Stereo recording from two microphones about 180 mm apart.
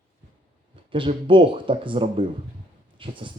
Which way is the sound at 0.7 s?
30° right (ahead or behind).